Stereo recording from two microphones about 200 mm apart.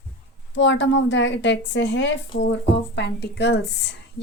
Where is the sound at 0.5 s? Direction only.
65° left (ahead or behind).